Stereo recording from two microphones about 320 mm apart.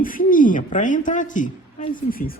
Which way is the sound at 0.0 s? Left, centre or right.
Left.